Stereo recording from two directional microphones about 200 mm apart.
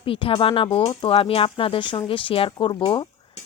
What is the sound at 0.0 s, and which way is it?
Speech, 25° left (ahead or behind).